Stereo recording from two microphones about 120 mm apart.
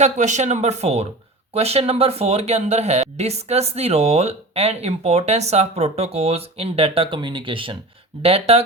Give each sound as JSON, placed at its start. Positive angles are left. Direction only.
{"t": 0.0, "sound": "speech", "side_deg": -80}